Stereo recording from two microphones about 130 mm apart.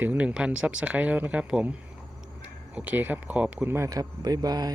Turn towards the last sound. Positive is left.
turn(degrees=-30)  # may be behind; listen again after turning